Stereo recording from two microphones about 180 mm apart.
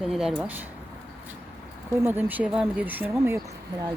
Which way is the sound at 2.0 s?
10° right (ahead or behind).